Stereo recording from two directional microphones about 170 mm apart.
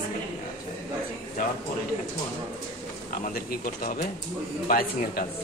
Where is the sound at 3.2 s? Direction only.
60° left (ahead or behind).